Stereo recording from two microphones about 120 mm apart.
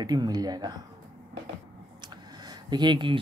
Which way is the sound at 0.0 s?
35° right (ahead or behind).